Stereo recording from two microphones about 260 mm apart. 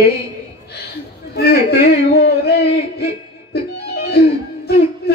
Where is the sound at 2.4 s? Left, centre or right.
Left.